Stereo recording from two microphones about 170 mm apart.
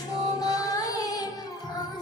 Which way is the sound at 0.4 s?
20° left (ahead or behind).